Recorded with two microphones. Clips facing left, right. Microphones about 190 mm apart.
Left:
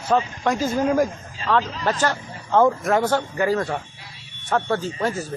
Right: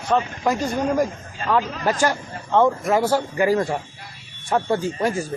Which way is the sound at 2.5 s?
Centre (ahead or behind).